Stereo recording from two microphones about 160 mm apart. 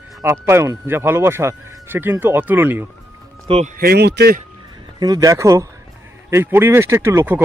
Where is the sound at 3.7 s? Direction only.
70° right (ahead or behind); by 4.4 s 90° right.